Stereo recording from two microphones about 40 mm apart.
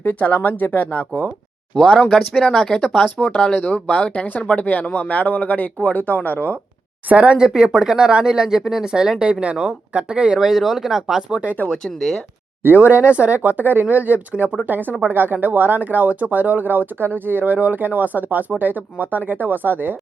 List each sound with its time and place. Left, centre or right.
0.3 s speech: left
1.7 s speech: left
2.3 s speech: centre
3.2 s speech: left
7.1 s speech: right
10.4 s speech: centre
11.7 s speech: centre
12.6 s speech: right
14.7 s speech: right